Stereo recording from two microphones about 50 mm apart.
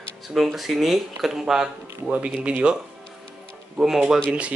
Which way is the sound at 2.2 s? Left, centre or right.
Right.